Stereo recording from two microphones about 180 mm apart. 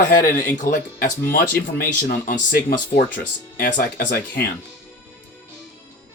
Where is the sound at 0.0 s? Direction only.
50° left (ahead or behind).